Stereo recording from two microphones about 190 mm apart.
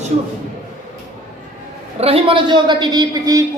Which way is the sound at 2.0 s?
30° right (ahead or behind).